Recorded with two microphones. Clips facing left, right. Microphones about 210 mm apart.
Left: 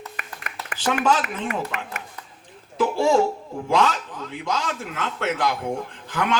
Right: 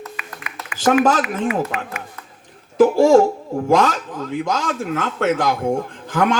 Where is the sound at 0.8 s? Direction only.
45° right (ahead or behind).